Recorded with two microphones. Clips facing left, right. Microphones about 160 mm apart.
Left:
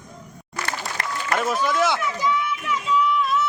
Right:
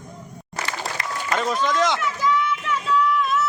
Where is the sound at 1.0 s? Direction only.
55° left (ahead or behind).